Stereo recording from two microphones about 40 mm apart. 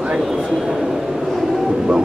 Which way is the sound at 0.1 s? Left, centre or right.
Centre.